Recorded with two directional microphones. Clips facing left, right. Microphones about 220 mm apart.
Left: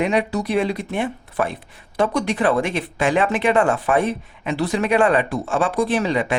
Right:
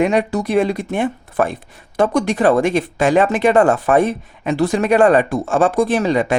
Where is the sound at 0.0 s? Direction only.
45° right (ahead or behind).